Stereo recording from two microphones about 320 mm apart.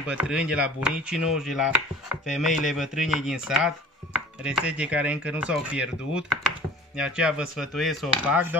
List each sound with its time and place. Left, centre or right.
0.0 s speech: centre